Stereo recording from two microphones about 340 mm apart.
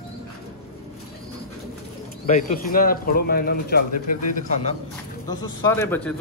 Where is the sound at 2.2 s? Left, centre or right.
Left.